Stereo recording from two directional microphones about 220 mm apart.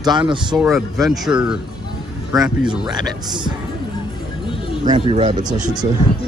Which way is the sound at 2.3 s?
15° right (ahead or behind).